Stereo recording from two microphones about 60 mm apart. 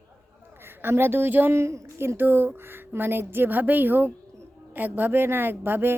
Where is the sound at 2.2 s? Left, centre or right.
Right.